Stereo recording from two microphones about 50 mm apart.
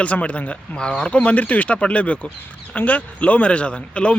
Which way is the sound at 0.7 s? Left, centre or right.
Centre.